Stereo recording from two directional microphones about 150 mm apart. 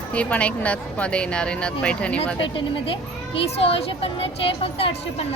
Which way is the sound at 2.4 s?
35° left (ahead or behind).